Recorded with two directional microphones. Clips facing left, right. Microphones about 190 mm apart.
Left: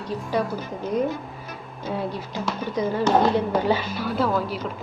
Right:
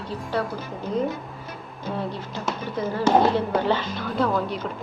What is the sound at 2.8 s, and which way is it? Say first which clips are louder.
A woman's voice: even; 15° left (ahead or behind).